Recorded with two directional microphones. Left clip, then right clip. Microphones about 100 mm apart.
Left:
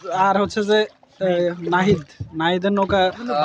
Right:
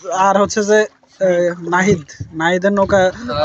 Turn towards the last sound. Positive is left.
turn(degrees=-10)  # may be behind; listen again after turning